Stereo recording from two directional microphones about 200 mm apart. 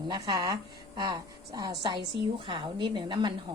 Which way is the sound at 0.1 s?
20° right (ahead or behind).